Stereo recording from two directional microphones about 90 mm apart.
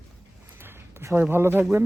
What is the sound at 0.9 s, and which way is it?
Speech, 25° right (ahead or behind).